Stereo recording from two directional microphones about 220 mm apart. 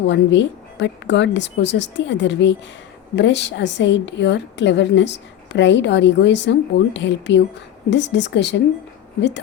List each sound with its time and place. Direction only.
0.1 s a woman's voice: 55° left (ahead or behind)